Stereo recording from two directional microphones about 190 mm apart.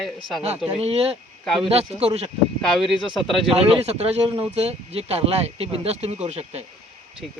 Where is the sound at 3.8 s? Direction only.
35° right (ahead or behind).